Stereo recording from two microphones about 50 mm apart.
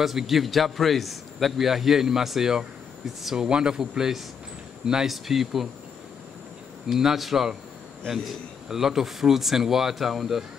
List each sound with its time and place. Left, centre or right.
0.0 s a man's voice: centre
6.9 s a man's voice: centre